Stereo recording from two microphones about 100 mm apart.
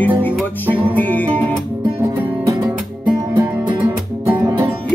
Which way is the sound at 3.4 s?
15° right (ahead or behind).